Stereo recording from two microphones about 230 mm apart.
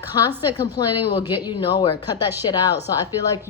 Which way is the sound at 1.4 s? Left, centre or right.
Centre.